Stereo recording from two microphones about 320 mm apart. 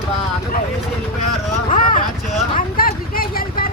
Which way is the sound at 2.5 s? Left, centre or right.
Left.